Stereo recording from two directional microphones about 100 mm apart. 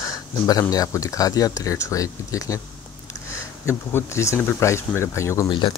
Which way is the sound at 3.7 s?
30° left (ahead or behind).